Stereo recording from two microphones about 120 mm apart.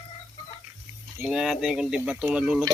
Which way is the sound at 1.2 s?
5° right (ahead or behind).